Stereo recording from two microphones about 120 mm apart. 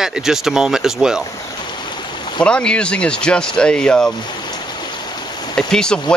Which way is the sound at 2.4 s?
10° left (ahead or behind).